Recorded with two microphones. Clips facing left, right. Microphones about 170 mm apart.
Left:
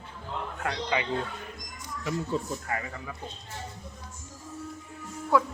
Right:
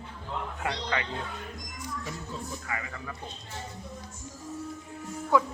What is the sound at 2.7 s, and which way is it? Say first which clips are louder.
Speech: left 3 dB; 40° left (ahead or behind).